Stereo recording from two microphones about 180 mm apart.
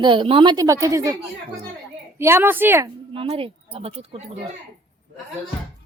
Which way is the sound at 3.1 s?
30° right (ahead or behind).